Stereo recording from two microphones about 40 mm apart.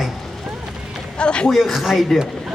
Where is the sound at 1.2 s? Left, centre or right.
Left.